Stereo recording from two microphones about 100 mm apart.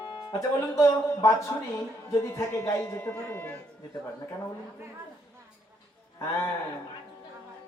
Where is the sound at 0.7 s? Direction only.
35° left (ahead or behind).